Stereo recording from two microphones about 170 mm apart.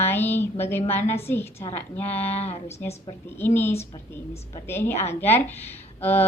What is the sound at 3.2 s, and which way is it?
A woman's voice, 15° left (ahead or behind).